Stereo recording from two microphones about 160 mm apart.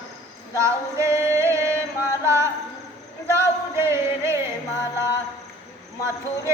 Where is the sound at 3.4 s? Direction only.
15° right (ahead or behind).